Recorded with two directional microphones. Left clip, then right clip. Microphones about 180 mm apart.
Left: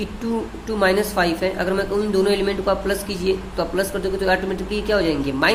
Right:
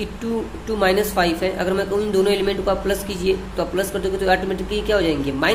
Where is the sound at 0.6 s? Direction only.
5° left (ahead or behind).